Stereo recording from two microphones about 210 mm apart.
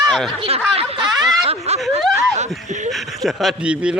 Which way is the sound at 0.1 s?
Centre (ahead or behind).